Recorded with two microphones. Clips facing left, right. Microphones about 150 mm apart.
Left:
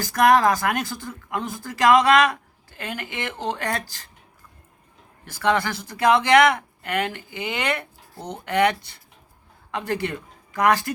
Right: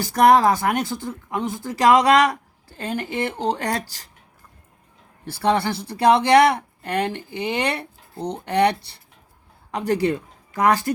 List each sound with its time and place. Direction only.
0.0 s speech: 25° right (ahead or behind)
5.2 s speech: 30° right (ahead or behind)